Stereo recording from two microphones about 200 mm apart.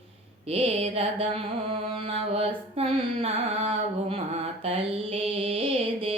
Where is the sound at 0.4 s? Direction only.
30° right (ahead or behind).